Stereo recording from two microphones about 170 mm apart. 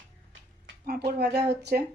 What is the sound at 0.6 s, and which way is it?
Speech, 65° right (ahead or behind).